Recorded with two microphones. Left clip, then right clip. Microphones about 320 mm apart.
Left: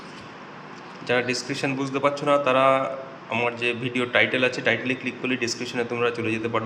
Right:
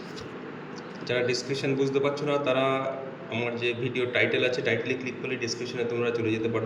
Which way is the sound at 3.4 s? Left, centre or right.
Centre.